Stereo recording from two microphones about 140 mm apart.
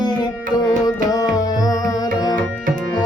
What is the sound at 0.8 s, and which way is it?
Tabla, 25° left (ahead or behind).